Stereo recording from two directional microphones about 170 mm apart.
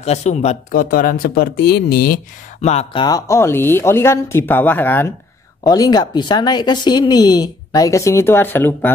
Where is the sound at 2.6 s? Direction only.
40° left (ahead or behind).